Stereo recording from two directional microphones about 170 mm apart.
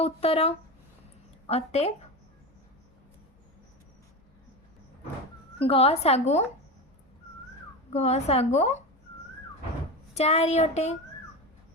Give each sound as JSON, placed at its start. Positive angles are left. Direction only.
{"t": 0.0, "sound": "a woman's voice", "side_deg": 35}
{"t": 5.5, "sound": "a woman's voice", "side_deg": 35}
{"t": 7.9, "sound": "a woman's voice", "side_deg": 40}
{"t": 10.2, "sound": "a woman's voice", "side_deg": 40}